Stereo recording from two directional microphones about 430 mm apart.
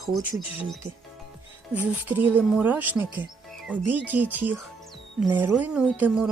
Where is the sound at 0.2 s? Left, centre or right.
Centre.